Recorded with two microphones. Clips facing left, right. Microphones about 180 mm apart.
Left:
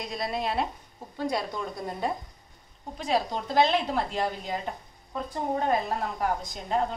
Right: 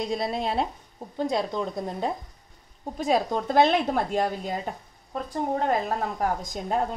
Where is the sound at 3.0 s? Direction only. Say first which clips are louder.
Right 4 dB; 50° right (ahead or behind).